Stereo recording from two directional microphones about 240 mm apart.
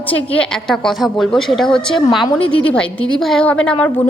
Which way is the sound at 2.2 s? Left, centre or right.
Centre.